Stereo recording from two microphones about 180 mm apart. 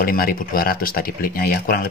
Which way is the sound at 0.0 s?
55° left (ahead or behind).